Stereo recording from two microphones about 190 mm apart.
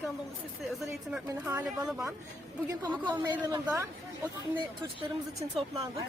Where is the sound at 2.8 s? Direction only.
20° right (ahead or behind).